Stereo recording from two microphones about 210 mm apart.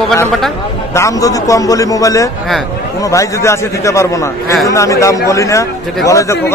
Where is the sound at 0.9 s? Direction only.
15° left (ahead or behind).